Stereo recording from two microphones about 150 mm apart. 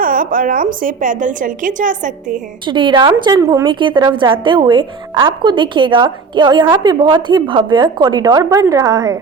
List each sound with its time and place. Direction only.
0.0 s a woman's voice: 70° right (ahead or behind)
2.6 s a woman's voice: 30° right (ahead or behind)
3.7 s a woman's voice: 30° right (ahead or behind)